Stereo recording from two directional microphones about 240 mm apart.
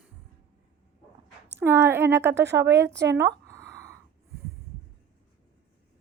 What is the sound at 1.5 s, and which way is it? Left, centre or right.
Speech, centre.